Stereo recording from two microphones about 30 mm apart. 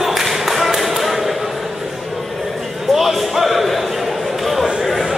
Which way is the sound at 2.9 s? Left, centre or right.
Centre.